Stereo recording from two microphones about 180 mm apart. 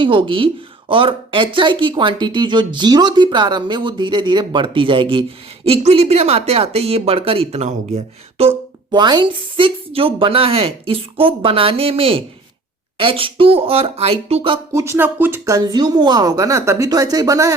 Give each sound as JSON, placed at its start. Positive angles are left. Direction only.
{"t": 0.0, "sound": "speech", "side_deg": -30}
{"t": 14.7, "sound": "speech", "side_deg": -15}